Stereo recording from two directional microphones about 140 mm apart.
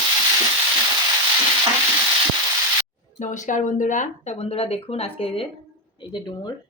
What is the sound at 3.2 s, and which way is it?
A woman's voice, 60° left (ahead or behind).